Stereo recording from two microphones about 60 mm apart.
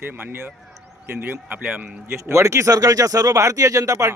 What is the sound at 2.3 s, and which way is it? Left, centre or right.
Speech, right.